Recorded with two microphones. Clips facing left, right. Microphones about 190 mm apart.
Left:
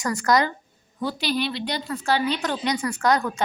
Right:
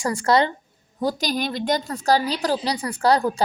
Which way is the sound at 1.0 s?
40° right (ahead or behind).